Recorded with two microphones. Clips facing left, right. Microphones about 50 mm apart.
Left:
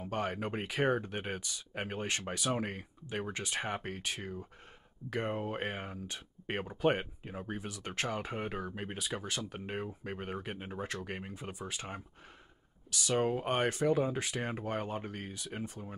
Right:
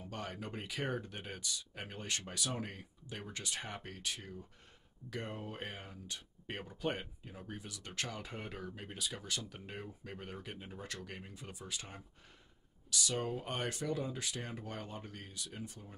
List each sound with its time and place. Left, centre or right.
0.0 s speech: left